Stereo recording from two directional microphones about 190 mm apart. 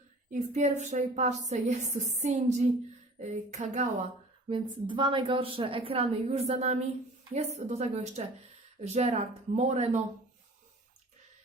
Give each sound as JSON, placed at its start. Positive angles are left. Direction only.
{"t": 0.3, "sound": "a woman's voice", "side_deg": -35}
{"t": 4.4, "sound": "a woman's voice", "side_deg": -25}